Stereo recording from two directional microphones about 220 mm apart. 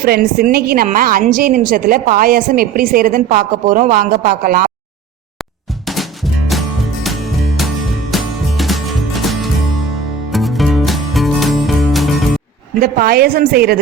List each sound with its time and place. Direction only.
0.0 s a woman's voice: 45° right (ahead or behind)
5.8 s music: centre (ahead or behind)
12.8 s a woman's voice: 45° right (ahead or behind)